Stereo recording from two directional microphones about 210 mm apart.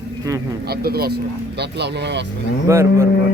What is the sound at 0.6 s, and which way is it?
Speech, 50° right (ahead or behind).